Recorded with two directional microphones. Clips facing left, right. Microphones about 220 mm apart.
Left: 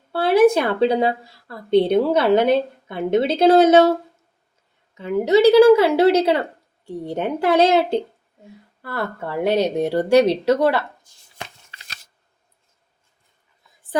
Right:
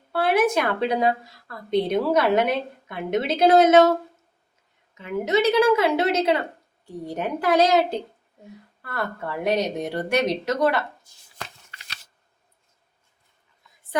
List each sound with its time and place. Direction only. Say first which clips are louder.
0.1 s a woman's voice: left 6 dB; 30° left (ahead or behind)
4.9 s a woman's voice: left 6 dB; 30° left (ahead or behind)
13.9 s a woman's voice: left 3 dB; 30° left (ahead or behind)